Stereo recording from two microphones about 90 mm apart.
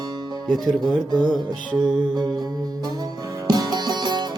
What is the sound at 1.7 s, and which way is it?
Music, 50° right (ahead or behind).